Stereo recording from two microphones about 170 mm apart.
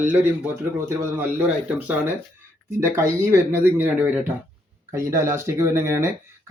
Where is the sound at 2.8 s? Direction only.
15° right (ahead or behind).